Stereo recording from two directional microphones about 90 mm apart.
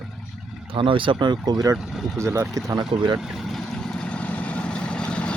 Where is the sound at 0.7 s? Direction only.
70° right (ahead or behind).